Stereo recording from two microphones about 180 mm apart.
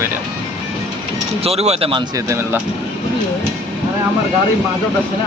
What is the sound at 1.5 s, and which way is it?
Speech, 35° right (ahead or behind).